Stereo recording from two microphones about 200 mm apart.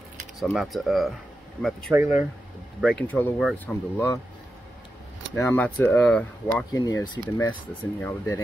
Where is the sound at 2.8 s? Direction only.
5° left (ahead or behind).